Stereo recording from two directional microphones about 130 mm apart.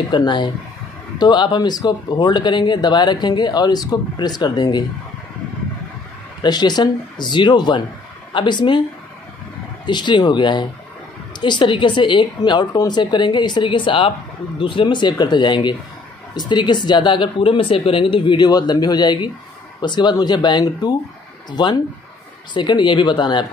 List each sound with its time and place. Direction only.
0.1 s speech: 35° left (ahead or behind)
6.4 s speech: 35° left (ahead or behind)
9.8 s speech: 35° left (ahead or behind)